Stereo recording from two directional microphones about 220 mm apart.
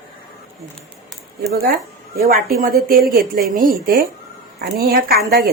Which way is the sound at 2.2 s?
40° right (ahead or behind).